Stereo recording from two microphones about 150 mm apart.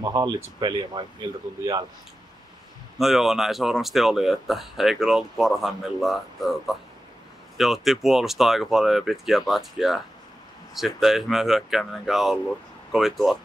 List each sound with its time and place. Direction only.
0.0 s speech: 25° right (ahead or behind)
3.0 s speech: centre (ahead or behind)